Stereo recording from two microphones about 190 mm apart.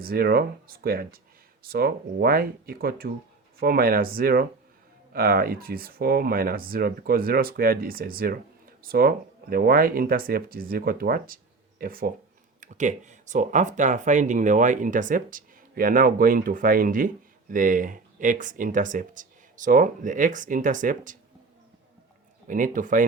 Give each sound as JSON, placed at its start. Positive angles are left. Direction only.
{"t": 0.0, "sound": "speech", "side_deg": -55}
{"t": 22.4, "sound": "speech", "side_deg": -45}